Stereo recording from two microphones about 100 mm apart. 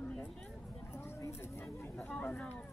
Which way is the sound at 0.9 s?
25° left (ahead or behind).